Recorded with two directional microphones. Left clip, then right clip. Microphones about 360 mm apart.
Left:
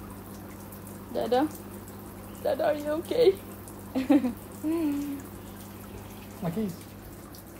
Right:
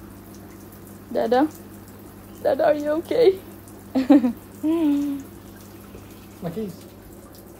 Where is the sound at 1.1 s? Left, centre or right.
Right.